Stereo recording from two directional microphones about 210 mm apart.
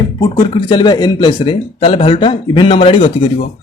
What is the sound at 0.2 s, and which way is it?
Speech, 20° left (ahead or behind).